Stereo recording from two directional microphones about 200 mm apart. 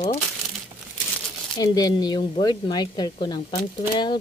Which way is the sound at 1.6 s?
20° left (ahead or behind).